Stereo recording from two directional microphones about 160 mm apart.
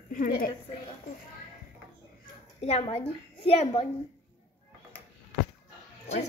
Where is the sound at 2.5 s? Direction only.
40° left (ahead or behind).